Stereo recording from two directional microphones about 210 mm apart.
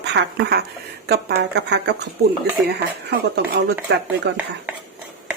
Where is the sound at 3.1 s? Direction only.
50° right (ahead or behind).